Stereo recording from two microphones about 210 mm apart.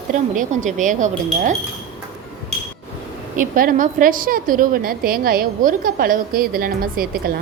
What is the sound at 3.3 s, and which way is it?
A woman's voice, 40° right (ahead or behind).